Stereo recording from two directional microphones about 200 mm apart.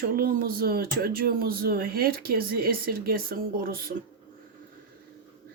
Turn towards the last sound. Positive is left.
turn(degrees=-45)  # may be behind; listen again after turning